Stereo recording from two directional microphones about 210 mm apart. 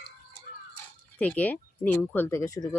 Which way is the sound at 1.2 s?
5° left (ahead or behind).